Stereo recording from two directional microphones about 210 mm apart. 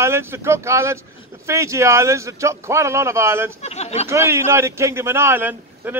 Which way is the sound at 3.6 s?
30° left (ahead or behind).